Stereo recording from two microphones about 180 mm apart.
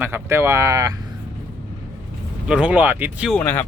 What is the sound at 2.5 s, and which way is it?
Speech, 5° right (ahead or behind).